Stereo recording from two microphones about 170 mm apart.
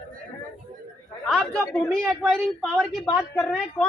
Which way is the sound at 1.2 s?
5° left (ahead or behind).